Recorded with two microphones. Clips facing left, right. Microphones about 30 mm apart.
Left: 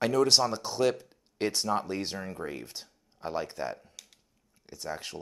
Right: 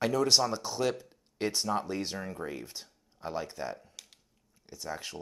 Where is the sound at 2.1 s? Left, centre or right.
Centre.